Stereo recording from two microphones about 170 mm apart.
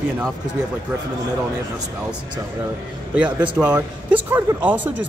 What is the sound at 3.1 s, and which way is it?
Speech, 5° right (ahead or behind).